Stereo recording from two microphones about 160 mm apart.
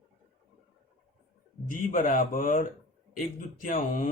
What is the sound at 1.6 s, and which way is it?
Speech, 60° left (ahead or behind).